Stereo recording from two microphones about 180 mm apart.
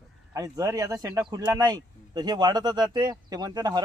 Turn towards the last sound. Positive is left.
turn(degrees=-20)  # may be behind; listen again after turning